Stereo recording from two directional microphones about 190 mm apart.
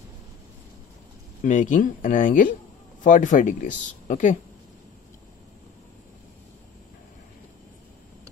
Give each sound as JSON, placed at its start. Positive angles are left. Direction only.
{"t": 1.4, "sound": "speech", "side_deg": 40}